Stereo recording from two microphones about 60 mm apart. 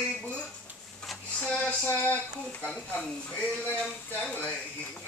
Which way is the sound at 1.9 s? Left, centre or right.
Left.